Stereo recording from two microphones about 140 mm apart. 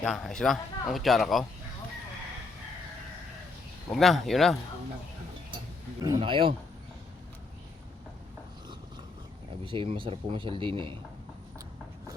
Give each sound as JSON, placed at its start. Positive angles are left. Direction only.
{"t": 0.0, "sound": "speech", "side_deg": 5}
{"t": 3.9, "sound": "speech", "side_deg": 0}
{"t": 6.1, "sound": "speech", "side_deg": -40}
{"t": 9.6, "sound": "speech", "side_deg": -40}